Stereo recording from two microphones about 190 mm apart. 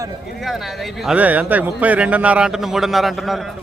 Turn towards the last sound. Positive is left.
turn(degrees=0)  # may be behind; listen again after turning